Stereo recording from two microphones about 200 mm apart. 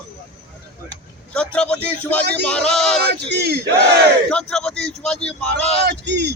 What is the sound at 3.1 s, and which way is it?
Speech, 55° right (ahead or behind).